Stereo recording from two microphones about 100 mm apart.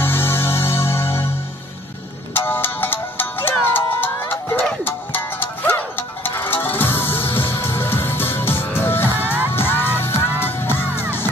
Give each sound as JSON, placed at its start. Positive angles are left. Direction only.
{"t": 0.0, "sound": "music", "side_deg": 20}
{"t": 2.3, "sound": "music", "side_deg": 20}